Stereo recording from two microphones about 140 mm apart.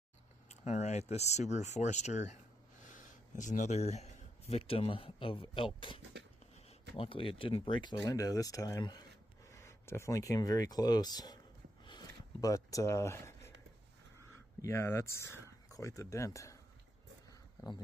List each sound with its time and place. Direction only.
0.5 s speech: 55° left (ahead or behind); by 5.9 s 35° left (ahead or behind)
7.0 s speech: 40° left (ahead or behind)
11.8 s a sound: 30° left (ahead or behind)
14.6 s speech: 20° left (ahead or behind)
17.6 s speech: 25° left (ahead or behind)